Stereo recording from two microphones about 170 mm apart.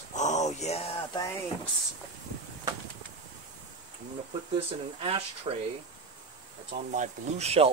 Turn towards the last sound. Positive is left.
turn(degrees=-40)  # may be behind; listen again after turning